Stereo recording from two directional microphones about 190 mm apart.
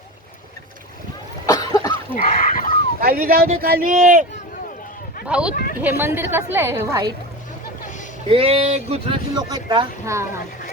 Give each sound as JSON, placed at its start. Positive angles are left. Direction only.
{"t": 1.5, "sound": "cough", "side_deg": 20}
{"t": 2.1, "sound": "a sound", "side_deg": 45}
{"t": 3.0, "sound": "speech", "side_deg": -50}
{"t": 5.3, "sound": "a woman's voice", "side_deg": -5}
{"t": 8.3, "sound": "speech", "side_deg": -30}
{"t": 9.3, "sound": "speech", "side_deg": -20}